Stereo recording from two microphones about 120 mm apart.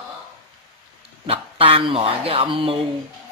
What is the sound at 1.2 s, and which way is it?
Speech, 50° right (ahead or behind).